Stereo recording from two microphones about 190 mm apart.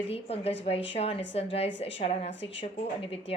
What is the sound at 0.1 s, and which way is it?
A woman's voice, 30° left (ahead or behind).